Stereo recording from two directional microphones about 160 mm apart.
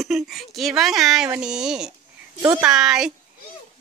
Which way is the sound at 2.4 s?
20° right (ahead or behind).